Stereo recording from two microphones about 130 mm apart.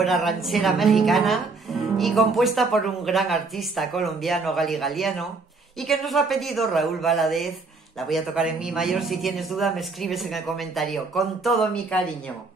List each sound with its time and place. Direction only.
0.0 s speech: centre (ahead or behind)